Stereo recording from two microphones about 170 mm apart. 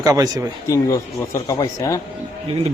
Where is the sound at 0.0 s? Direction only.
20° right (ahead or behind).